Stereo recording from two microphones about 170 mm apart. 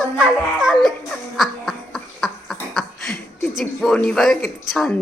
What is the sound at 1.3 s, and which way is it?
Cough, centre (ahead or behind).